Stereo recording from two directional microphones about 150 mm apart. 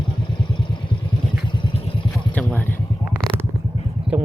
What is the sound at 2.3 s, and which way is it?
Vehicle, 10° left (ahead or behind).